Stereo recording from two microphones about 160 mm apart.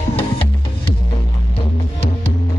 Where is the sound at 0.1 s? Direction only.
35° left (ahead or behind).